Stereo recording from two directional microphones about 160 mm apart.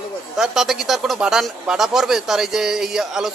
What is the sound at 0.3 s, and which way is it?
A man's voice, centre (ahead or behind).